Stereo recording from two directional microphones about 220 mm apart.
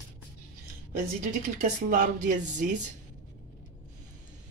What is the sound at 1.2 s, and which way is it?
Speech, 35° right (ahead or behind).